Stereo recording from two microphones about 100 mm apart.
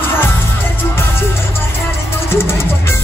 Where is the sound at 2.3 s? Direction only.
25° left (ahead or behind).